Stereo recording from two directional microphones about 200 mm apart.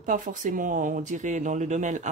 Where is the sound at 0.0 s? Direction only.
40° right (ahead or behind).